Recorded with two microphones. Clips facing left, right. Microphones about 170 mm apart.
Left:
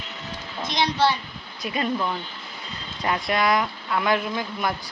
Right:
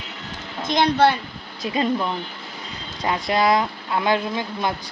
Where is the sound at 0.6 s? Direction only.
50° right (ahead or behind).